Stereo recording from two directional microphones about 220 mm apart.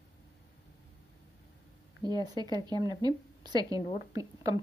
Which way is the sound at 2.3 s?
20° right (ahead or behind).